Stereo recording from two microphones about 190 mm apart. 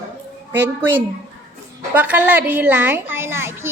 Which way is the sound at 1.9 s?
10° right (ahead or behind).